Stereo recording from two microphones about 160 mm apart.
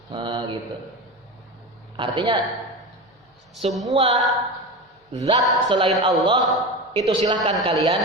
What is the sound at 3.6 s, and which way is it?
Speech, 40° right (ahead or behind).